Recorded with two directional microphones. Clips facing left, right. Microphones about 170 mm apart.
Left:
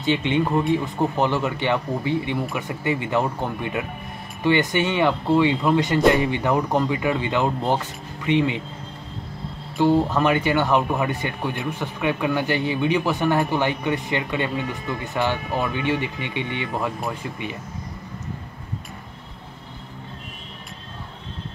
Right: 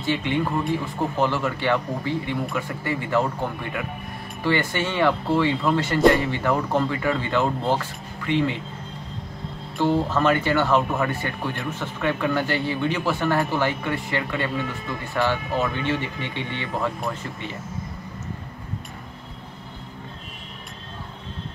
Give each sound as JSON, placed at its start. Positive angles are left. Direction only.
{"t": 0.0, "sound": "speech", "side_deg": 20}
{"t": 4.4, "sound": "speech", "side_deg": 20}
{"t": 9.8, "sound": "speech", "side_deg": 15}